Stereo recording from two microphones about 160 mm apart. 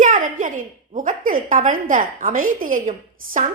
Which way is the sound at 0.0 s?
55° right (ahead or behind).